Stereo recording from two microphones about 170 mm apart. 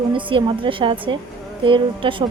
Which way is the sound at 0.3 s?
30° right (ahead or behind).